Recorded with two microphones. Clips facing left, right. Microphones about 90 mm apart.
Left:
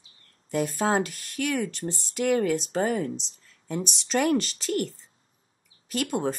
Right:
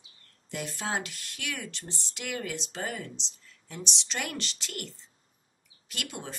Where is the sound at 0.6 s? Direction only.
45° left (ahead or behind).